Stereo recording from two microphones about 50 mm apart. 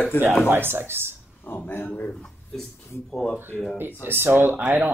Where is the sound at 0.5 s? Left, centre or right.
Right.